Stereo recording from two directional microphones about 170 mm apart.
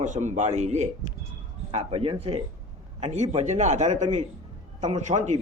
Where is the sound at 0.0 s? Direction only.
45° right (ahead or behind).